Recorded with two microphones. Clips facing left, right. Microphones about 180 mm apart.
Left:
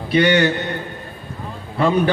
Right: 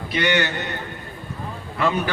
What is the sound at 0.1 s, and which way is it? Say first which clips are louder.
Speech: left 6 dB; 30° left (ahead or behind).